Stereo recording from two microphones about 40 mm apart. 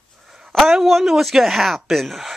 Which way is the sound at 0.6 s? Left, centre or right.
Centre.